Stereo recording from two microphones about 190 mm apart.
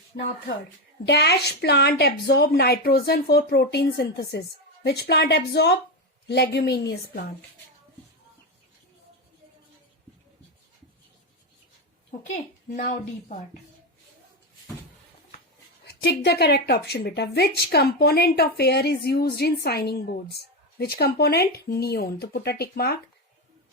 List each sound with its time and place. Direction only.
1.0 s a woman's voice: 60° left (ahead or behind)
12.1 s a woman's voice: 45° left (ahead or behind)
15.9 s a woman's voice: 60° left (ahead or behind)